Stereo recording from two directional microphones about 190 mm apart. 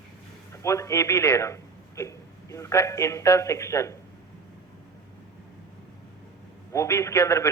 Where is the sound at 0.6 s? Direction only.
15° left (ahead or behind).